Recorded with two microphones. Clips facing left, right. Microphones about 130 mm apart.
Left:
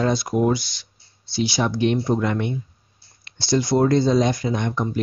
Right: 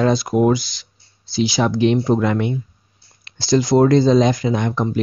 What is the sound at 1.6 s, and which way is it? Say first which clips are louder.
Speech: right 4 dB; 90° right.